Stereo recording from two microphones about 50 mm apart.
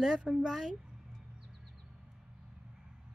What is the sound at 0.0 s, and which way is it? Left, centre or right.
Speech, centre.